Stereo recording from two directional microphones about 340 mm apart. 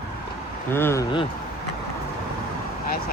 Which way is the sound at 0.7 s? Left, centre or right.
Centre.